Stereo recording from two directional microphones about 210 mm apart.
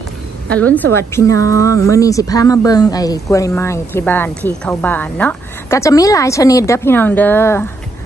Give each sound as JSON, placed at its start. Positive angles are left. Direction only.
{"t": 0.5, "sound": "speech", "side_deg": 5}